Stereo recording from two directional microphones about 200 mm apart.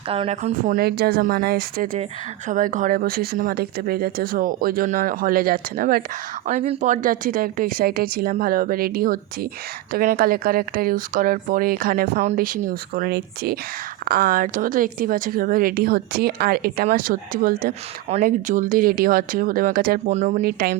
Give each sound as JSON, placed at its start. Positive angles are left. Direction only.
{"t": 0.1, "sound": "speech", "side_deg": -30}
{"t": 0.8, "sound": "speech", "side_deg": -50}
{"t": 6.5, "sound": "speech", "side_deg": -35}
{"t": 20.4, "sound": "speech", "side_deg": -50}